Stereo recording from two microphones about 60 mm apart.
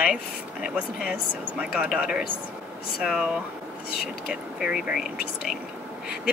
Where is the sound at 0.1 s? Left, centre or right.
Centre.